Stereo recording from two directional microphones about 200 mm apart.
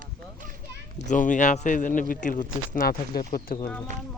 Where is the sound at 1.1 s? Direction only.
40° left (ahead or behind).